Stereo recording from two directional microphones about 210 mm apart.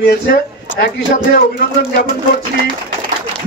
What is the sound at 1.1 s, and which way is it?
Speech, 45° left (ahead or behind).